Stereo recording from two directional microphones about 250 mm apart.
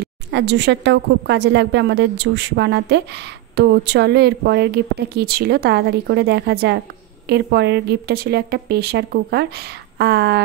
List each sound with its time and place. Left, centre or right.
0.0 s a woman's voice: right